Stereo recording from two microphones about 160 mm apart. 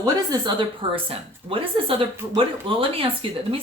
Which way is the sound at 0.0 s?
25° right (ahead or behind).